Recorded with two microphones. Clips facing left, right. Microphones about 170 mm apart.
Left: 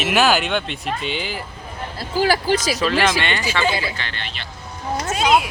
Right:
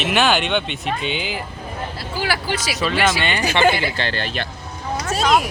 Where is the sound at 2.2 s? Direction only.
40° left (ahead or behind).